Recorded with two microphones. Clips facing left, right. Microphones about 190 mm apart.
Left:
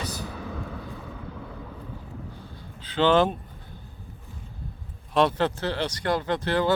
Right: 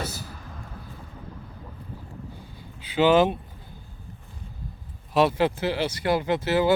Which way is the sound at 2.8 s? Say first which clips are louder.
Right 2 dB; 10° right (ahead or behind).